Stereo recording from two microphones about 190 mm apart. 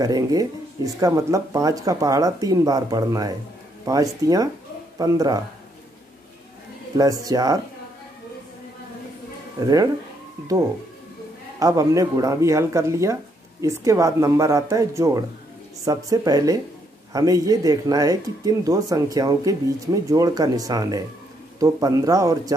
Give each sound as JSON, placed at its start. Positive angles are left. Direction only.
{"t": 0.0, "sound": "speech", "side_deg": -20}
{"t": 7.0, "sound": "speech", "side_deg": -20}
{"t": 11.6, "sound": "speech", "side_deg": -15}